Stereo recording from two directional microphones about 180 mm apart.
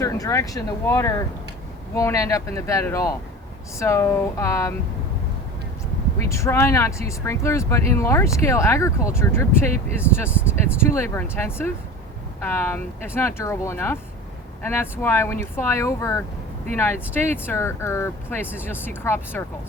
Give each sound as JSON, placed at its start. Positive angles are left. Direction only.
{"t": 0.0, "sound": "speech", "side_deg": 15}
{"t": 6.1, "sound": "speech", "side_deg": 15}